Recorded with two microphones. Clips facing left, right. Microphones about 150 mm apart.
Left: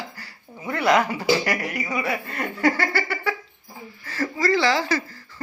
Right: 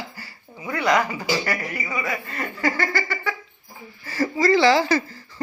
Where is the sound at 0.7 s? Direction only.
5° left (ahead or behind).